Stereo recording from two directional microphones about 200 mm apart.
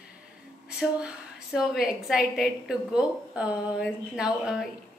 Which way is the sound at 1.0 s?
Centre (ahead or behind).